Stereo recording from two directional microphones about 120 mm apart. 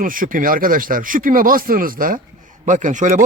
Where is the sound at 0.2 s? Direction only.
70° right (ahead or behind).